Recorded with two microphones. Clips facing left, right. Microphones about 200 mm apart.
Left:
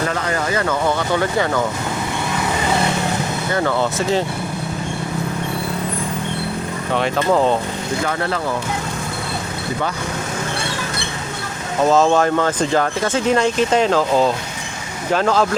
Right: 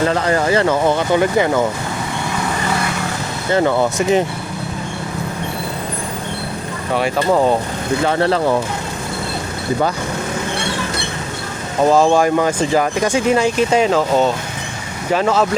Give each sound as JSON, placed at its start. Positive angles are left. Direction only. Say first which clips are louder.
{"t": 0.1, "sound": "speech", "louder": "right 5 dB", "side_deg": -35}
{"t": 3.5, "sound": "speech", "louder": "right 5 dB", "side_deg": -20}
{"t": 6.9, "sound": "speech", "louder": "right 1 dB", "side_deg": -5}
{"t": 8.0, "sound": "speech", "louder": "right 7 dB", "side_deg": -35}
{"t": 11.8, "sound": "speech", "louder": "right 2 dB", "side_deg": -10}